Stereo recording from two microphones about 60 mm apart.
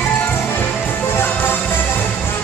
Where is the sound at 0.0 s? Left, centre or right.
Left.